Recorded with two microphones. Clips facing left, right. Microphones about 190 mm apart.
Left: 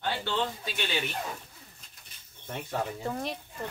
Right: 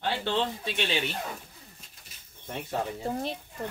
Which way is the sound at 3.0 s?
30° right (ahead or behind).